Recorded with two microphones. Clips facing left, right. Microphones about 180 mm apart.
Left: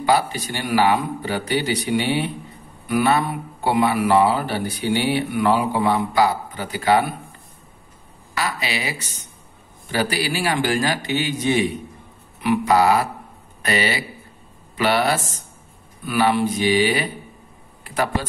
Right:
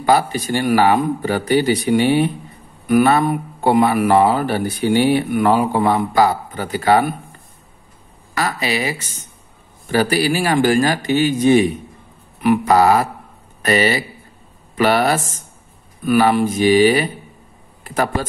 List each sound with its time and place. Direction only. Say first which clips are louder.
0.0 s a man's voice: right 3 dB; 45° right (ahead or behind)
8.4 s a man's voice: right 5 dB; 45° right (ahead or behind)
17.8 s a sound: right 3 dB; 45° right (ahead or behind)